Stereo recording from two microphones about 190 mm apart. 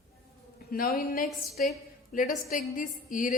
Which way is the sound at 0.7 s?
50° left (ahead or behind).